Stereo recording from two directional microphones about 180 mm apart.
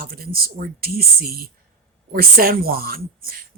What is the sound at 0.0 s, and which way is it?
Speech, 55° right (ahead or behind).